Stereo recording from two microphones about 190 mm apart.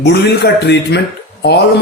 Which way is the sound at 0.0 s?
65° left (ahead or behind).